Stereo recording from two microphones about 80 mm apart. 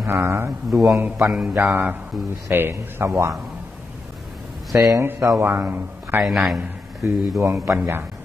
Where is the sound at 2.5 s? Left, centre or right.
Right.